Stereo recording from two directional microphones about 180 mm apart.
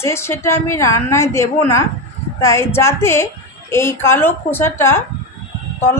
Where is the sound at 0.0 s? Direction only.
15° left (ahead or behind).